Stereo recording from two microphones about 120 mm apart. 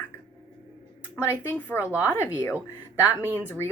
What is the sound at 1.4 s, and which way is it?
Speech, 20° left (ahead or behind).